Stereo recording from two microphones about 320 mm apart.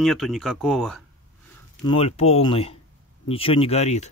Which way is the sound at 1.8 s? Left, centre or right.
Centre.